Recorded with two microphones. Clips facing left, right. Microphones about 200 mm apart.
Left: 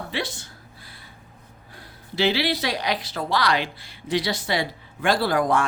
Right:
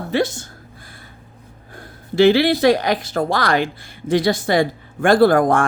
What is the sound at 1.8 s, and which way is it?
Speech, 50° right (ahead or behind).